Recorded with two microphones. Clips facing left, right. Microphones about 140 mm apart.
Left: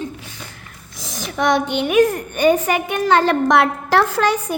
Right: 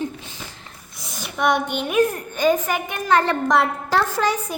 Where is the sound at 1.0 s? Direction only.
90° left.